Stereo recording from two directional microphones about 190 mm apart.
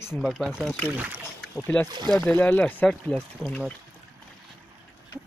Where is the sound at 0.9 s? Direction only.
10° right (ahead or behind).